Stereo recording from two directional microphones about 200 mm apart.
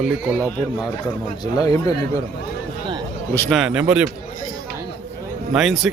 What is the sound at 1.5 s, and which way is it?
Speech, 20° left (ahead or behind).